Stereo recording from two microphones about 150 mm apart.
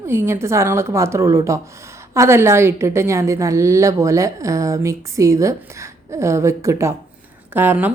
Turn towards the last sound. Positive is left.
turn(degrees=-15)  # may be behind; listen again after turning